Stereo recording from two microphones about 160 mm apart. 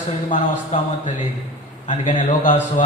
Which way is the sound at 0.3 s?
55° left (ahead or behind).